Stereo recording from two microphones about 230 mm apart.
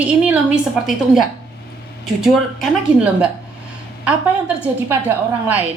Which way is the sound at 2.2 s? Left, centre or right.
Centre.